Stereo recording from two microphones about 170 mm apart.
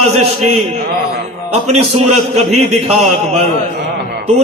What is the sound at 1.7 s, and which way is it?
A man's voice, 40° right (ahead or behind).